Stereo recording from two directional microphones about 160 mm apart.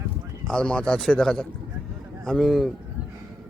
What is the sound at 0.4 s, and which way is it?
Speech, 5° left (ahead or behind).